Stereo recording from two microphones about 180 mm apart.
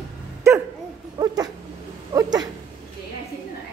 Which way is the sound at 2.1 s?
20° right (ahead or behind).